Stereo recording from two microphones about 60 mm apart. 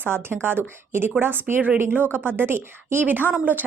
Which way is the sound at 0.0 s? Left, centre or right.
Right.